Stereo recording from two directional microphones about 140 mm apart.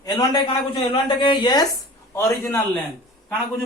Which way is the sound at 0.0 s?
30° left (ahead or behind).